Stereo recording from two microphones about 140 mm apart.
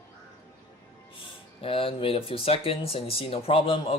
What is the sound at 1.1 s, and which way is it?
Speech, 40° left (ahead or behind).